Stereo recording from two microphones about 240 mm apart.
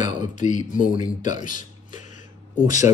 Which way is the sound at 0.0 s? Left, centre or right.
Left.